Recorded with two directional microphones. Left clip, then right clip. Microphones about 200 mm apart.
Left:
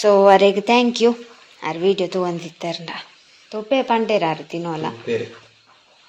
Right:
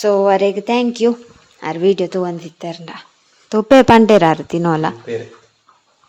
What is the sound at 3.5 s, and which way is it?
Speech, 50° right (ahead or behind).